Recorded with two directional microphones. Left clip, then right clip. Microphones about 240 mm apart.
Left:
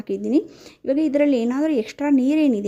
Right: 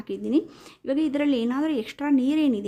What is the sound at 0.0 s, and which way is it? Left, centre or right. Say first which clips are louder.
Speech: left 4 dB; centre.